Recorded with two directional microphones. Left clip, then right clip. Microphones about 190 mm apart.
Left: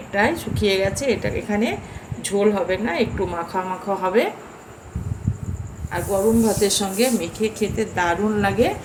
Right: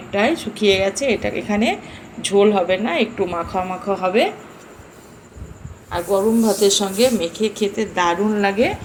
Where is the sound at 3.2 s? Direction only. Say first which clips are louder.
Right 2 dB; 5° right (ahead or behind).